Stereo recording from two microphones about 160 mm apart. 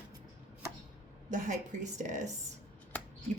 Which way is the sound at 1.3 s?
50° right (ahead or behind).